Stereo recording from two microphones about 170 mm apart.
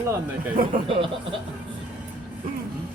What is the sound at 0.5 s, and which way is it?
Speech, 55° right (ahead or behind).